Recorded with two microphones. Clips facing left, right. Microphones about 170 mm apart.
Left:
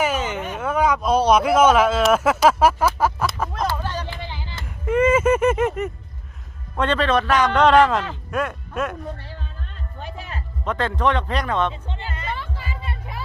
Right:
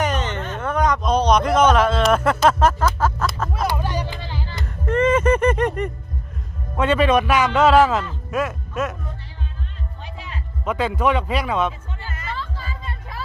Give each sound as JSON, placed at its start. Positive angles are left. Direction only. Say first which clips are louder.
{"t": 0.0, "sound": "a sound", "louder": "left 1 dB", "side_deg": 5}
{"t": 3.5, "sound": "music", "louder": "right 1 dB", "side_deg": -10}
{"t": 4.6, "sound": "a sound", "louder": "left 1 dB", "side_deg": 10}
{"t": 6.7, "sound": "a man's voice", "louder": "right 3 dB", "side_deg": -10}
{"t": 10.0, "sound": "music", "louder": "left 4 dB", "side_deg": 45}
{"t": 10.6, "sound": "a man's voice", "louder": "right 1 dB", "side_deg": -10}
{"t": 11.7, "sound": "music", "louder": "left 3 dB", "side_deg": 25}